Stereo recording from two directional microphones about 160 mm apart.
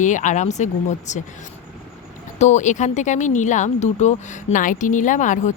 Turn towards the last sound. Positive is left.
turn(degrees=50)  # may be behind; listen again after turning